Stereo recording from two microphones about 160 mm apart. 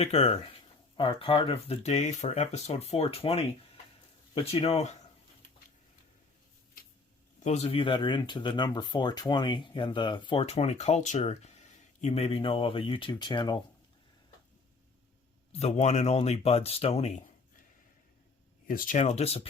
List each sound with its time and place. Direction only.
0.0 s speech: 40° left (ahead or behind)
7.3 s speech: 45° left (ahead or behind); by 10.4 s 30° left (ahead or behind)
10.4 s speech: 40° left (ahead or behind)
15.5 s speech: 40° left (ahead or behind)
18.7 s speech: 60° left (ahead or behind); by 19.5 s 40° left (ahead or behind)